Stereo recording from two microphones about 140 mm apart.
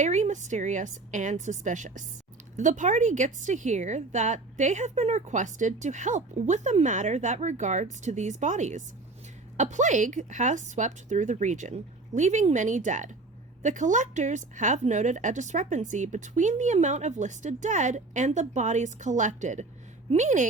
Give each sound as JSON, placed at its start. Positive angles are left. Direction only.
{"t": 0.0, "sound": "a woman's voice", "side_deg": -55}